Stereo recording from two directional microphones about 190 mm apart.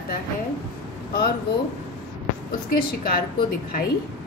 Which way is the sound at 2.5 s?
50° left (ahead or behind).